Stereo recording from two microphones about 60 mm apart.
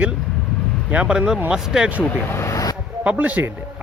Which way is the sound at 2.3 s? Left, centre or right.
Left.